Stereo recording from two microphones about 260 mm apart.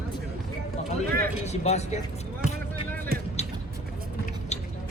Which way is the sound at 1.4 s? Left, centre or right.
Left.